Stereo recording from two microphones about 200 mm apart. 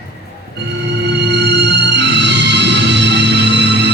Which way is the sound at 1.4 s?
60° right (ahead or behind).